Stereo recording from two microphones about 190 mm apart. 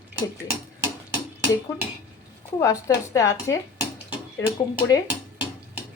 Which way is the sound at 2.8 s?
15° left (ahead or behind).